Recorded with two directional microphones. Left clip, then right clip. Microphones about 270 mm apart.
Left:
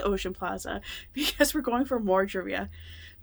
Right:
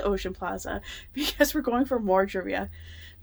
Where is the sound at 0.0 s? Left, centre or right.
Centre.